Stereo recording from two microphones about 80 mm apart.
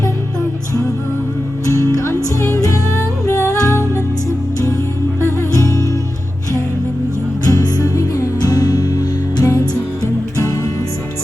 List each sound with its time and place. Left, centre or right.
1.6 s music: left
5.4 s music: left
7.4 s music: left